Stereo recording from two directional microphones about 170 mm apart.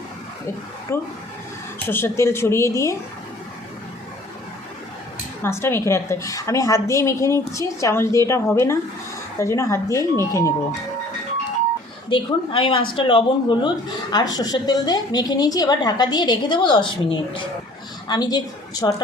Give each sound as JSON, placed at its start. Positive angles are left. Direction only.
{"t": 0.9, "sound": "a woman's voice", "side_deg": 15}
{"t": 5.4, "sound": "a woman's voice", "side_deg": 15}
{"t": 12.0, "sound": "a woman's voice", "side_deg": 30}